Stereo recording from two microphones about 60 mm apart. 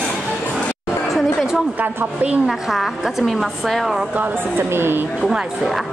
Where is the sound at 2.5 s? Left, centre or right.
Centre.